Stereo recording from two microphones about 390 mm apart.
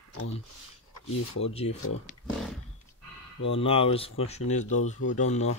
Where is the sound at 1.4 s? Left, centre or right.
Centre.